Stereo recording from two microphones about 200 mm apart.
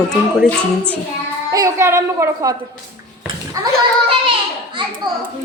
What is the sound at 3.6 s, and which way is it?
Speech, 15° right (ahead or behind).